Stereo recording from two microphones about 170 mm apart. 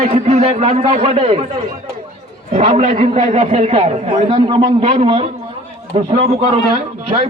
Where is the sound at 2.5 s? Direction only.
40° right (ahead or behind).